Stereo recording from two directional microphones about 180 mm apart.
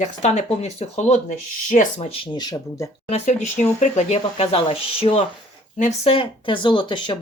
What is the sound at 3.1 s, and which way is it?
Speech, 40° left (ahead or behind).